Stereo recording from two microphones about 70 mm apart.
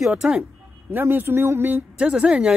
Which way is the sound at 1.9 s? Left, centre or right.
Centre.